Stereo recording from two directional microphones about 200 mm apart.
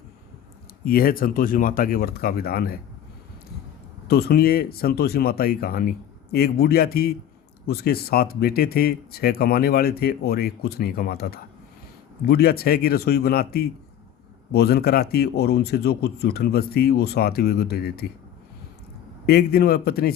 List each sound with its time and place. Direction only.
0.9 s speech: 45° left (ahead or behind)
4.1 s speech: 50° left (ahead or behind)
19.2 s speech: 50° left (ahead or behind)